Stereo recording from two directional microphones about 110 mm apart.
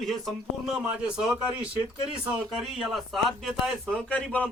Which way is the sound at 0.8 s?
10° right (ahead or behind).